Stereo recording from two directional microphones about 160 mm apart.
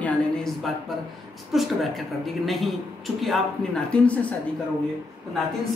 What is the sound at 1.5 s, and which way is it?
Speech, centre (ahead or behind).